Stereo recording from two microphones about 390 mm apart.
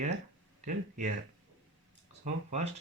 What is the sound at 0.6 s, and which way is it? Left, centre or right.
Speech, centre.